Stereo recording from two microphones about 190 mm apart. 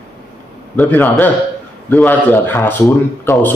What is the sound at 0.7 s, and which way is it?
A man's voice, 10° left (ahead or behind).